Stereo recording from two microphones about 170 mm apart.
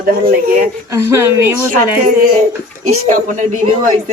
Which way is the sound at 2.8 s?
45° right (ahead or behind).